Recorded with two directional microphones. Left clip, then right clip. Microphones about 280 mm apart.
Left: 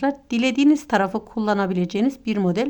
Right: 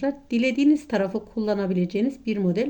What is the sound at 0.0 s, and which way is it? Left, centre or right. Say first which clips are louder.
Speech: left 2 dB; left.